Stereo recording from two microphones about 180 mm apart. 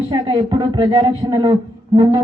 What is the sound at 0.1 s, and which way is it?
A man's voice, 25° right (ahead or behind).